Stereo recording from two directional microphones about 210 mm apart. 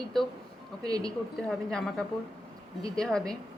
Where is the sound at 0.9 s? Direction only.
20° right (ahead or behind).